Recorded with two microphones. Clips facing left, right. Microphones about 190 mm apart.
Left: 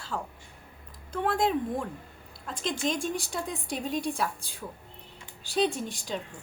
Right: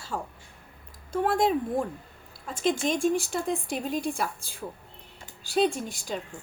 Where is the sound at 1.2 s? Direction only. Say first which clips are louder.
Right 2 dB; 5° right (ahead or behind).